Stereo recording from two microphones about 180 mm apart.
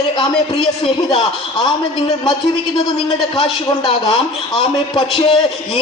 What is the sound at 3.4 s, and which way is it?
Speech, 25° left (ahead or behind).